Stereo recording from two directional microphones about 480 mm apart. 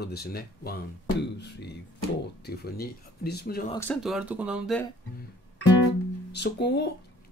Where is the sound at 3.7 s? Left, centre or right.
Centre.